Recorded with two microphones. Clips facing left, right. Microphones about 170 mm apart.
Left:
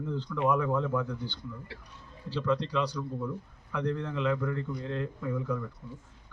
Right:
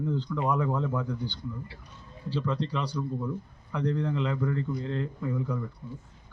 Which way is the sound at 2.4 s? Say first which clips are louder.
Left 5 dB; 10° right (ahead or behind).